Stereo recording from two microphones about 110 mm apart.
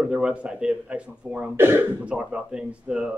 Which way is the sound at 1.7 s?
20° right (ahead or behind).